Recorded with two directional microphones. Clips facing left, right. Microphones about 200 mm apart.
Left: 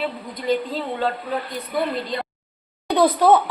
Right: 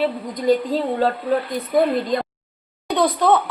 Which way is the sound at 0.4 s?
40° right (ahead or behind).